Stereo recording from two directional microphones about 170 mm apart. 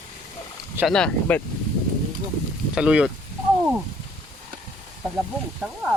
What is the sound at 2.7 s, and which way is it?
Speech, 5° right (ahead or behind).